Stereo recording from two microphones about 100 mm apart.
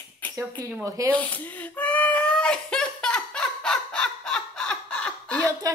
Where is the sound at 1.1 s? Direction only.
15° left (ahead or behind).